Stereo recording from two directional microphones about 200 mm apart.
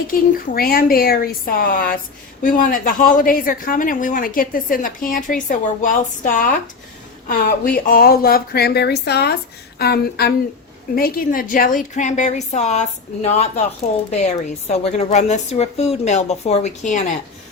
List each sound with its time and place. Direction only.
0.1 s a woman's voice: 50° left (ahead or behind)